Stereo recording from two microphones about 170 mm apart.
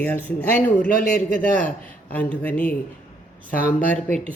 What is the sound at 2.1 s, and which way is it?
Mantra, 10° left (ahead or behind).